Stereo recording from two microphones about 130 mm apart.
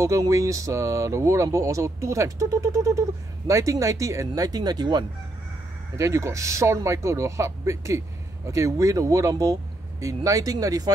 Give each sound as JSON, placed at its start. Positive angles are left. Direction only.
{"t": 0.0, "sound": "speech", "side_deg": -25}
{"t": 5.9, "sound": "speech", "side_deg": -25}